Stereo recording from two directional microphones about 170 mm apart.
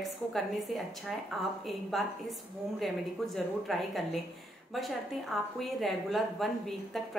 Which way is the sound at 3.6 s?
Centre (ahead or behind).